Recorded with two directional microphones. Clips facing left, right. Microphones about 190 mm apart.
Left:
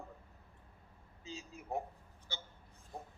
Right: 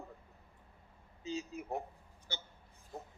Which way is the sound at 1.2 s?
70° right (ahead or behind).